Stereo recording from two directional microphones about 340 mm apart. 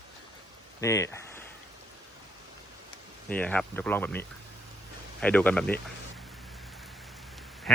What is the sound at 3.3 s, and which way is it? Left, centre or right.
Speech, centre.